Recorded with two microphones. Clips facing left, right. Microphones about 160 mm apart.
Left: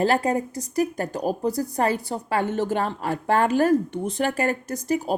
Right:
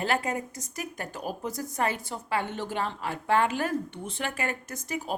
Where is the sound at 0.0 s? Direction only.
35° left (ahead or behind).